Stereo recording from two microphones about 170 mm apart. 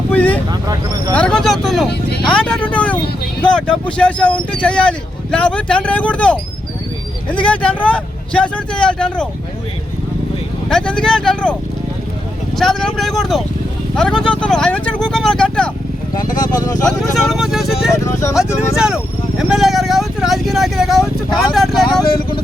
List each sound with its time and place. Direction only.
0.1 s vehicle: 10° left (ahead or behind)
0.5 s speech: 20° right (ahead or behind)
1.1 s speech: 5° left (ahead or behind)
1.9 s speech: 70° left (ahead or behind)
2.3 s speech: 5° left (ahead or behind)
7.4 s speech: 5° left (ahead or behind)
10.7 s speech: 5° left (ahead or behind)
12.5 s speech: centre (ahead or behind)
16.4 s speech: 20° left (ahead or behind)
17.0 s speech: centre (ahead or behind)
17.9 s speech: 15° left (ahead or behind)
19.4 s speech: centre (ahead or behind)